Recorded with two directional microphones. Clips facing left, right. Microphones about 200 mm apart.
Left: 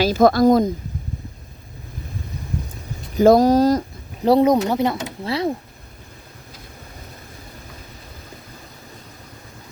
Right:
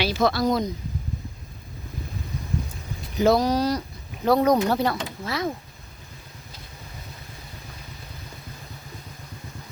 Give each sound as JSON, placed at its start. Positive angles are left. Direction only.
{"t": 0.0, "sound": "speech", "side_deg": 45}
{"t": 3.2, "sound": "speech", "side_deg": 45}
{"t": 4.3, "sound": "speech", "side_deg": 30}
{"t": 4.7, "sound": "speech", "side_deg": 20}